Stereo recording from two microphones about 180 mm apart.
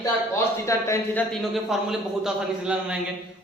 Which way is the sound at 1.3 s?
Centre (ahead or behind).